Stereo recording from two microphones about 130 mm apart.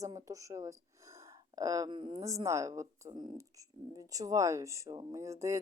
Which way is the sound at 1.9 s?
40° right (ahead or behind).